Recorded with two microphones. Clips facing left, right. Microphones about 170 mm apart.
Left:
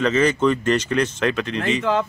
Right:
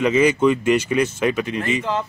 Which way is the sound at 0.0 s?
10° right (ahead or behind).